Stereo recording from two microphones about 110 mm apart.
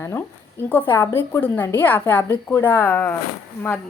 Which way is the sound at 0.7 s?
20° left (ahead or behind).